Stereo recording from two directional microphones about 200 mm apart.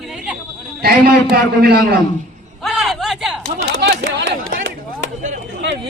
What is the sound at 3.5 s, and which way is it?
Speech, 55° right (ahead or behind).